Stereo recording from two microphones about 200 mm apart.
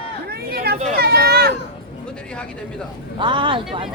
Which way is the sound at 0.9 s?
50° right (ahead or behind).